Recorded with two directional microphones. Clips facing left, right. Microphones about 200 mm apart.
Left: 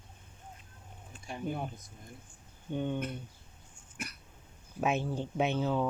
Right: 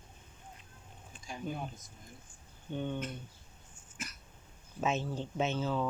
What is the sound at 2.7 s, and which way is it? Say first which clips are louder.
Speech: left 3 dB; 15° left (ahead or behind).